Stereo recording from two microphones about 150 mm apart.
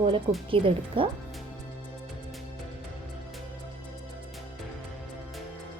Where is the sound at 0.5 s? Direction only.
35° right (ahead or behind).